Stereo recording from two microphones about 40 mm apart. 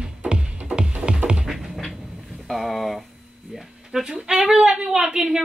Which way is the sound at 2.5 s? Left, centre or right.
Centre.